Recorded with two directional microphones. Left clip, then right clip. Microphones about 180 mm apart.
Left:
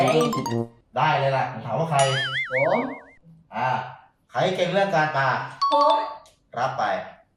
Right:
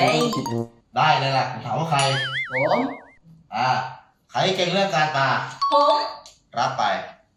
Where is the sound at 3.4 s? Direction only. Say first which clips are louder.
Right 3 dB; 20° left (ahead or behind).